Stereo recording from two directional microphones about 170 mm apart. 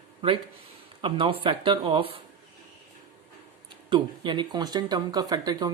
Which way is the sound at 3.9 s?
30° right (ahead or behind).